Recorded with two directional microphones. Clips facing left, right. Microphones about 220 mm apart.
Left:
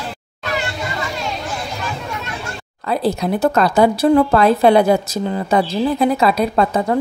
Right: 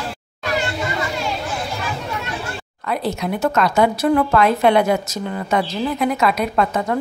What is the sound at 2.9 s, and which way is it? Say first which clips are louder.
A woman's voice: left 4 dB; 35° left (ahead or behind).